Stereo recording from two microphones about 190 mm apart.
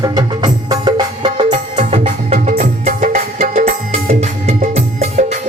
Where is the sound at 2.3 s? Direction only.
45° right (ahead or behind).